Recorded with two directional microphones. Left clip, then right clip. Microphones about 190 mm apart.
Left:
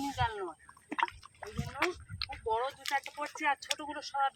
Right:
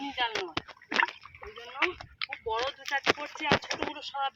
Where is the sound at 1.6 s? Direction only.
Centre (ahead or behind).